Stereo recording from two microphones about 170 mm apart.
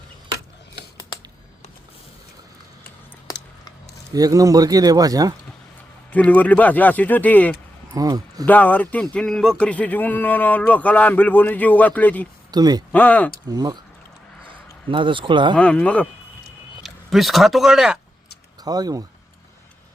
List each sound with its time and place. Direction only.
3.3 s a sound: 20° left (ahead or behind)
4.1 s speech: 20° right (ahead or behind)
6.1 s speech: 10° left (ahead or behind)
7.9 s speech: 20° right (ahead or behind)
8.4 s speech: 10° left (ahead or behind)
12.5 s speech: 25° right (ahead or behind)
12.9 s speech: 10° left (ahead or behind)
13.4 s speech: 25° right (ahead or behind)
14.8 s speech: 30° right (ahead or behind)
15.5 s speech: 5° left (ahead or behind)
18.6 s speech: 20° right (ahead or behind)